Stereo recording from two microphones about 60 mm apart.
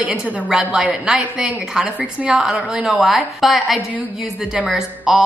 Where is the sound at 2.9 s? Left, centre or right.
Centre.